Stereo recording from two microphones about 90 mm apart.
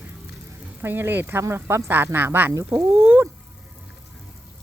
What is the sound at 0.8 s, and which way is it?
Speech, 25° right (ahead or behind).